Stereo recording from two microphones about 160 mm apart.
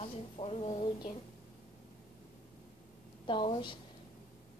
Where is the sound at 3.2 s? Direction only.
30° left (ahead or behind).